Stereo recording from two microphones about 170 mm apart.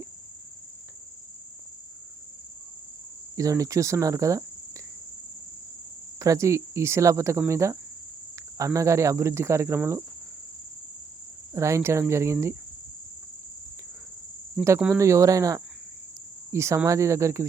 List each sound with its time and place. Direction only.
3.3 s speech: 20° right (ahead or behind)
6.1 s cricket: 20° right (ahead or behind)
11.5 s cricket: 15° right (ahead or behind)
14.6 s cricket: 10° right (ahead or behind)